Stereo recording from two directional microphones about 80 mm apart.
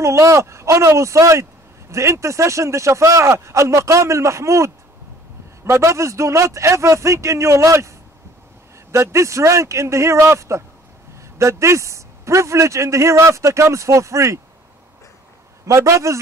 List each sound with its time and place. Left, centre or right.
0.0 s speech: right
8.9 s speech: right
15.6 s speech: right